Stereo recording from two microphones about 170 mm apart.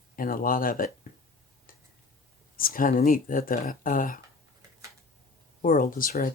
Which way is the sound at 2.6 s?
55° left (ahead or behind).